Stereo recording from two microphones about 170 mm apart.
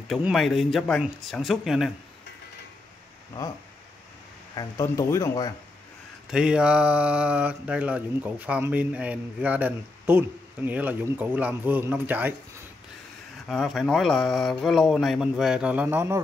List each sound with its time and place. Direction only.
0.1 s speech: centre (ahead or behind)
4.6 s speech: 20° left (ahead or behind)
6.3 s speech: 5° right (ahead or behind)
13.5 s speech: centre (ahead or behind)